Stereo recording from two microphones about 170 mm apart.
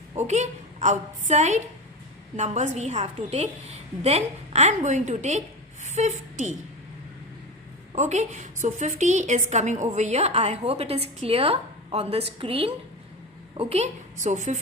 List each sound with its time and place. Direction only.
0.3 s a woman's voice: 45° right (ahead or behind)
7.9 s a woman's voice: 45° right (ahead or behind)